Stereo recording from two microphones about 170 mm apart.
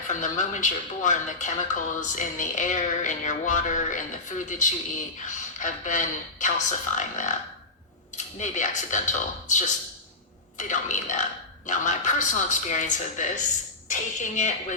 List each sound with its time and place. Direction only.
0.1 s speech: 45° left (ahead or behind)